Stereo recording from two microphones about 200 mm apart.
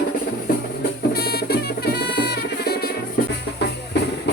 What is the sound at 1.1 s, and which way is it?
Music, 50° left (ahead or behind).